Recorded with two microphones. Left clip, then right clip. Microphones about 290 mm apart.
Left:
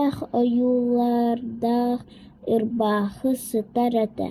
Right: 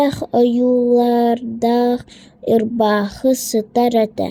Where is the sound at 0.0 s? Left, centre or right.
Right.